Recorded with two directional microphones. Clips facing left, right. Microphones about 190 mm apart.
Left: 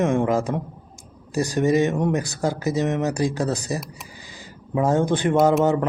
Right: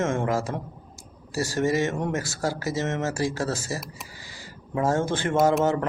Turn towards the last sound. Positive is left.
turn(degrees=20)  # may be behind; listen again after turning